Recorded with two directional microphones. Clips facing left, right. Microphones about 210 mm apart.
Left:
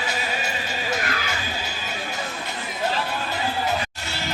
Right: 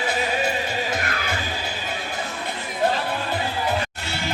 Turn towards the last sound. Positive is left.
turn(degrees=-55)  # may be behind; listen again after turning